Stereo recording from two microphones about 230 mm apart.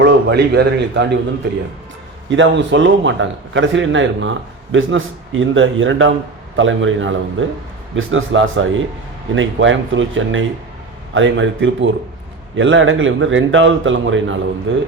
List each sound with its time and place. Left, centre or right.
0.0 s a man's voice: right
2.3 s a man's voice: right